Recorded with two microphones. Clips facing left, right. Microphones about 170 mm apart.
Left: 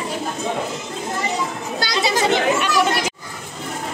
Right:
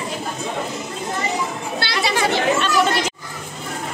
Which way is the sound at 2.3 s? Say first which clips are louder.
Left 1 dB; 10° left (ahead or behind).